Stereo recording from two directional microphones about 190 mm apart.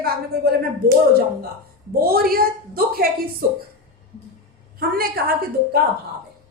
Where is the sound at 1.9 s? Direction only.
50° right (ahead or behind).